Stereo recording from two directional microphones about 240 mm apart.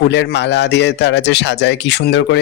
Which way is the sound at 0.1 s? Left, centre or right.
Left.